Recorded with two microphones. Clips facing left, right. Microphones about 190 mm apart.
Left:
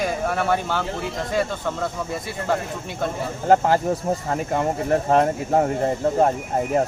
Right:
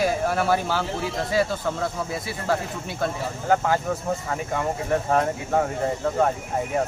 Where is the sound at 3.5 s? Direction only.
35° left (ahead or behind).